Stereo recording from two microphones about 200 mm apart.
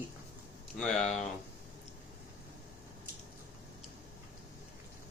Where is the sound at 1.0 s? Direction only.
35° left (ahead or behind).